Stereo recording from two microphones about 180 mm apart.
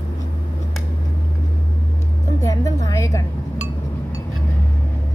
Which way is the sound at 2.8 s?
15° left (ahead or behind).